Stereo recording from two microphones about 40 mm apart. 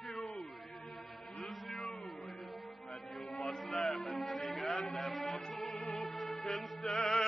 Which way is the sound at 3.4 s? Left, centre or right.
Centre.